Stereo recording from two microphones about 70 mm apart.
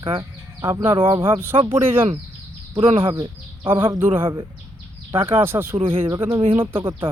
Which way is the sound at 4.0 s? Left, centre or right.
Right.